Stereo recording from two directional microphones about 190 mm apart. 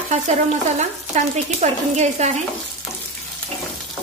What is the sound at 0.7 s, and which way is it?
A woman's voice, 35° right (ahead or behind).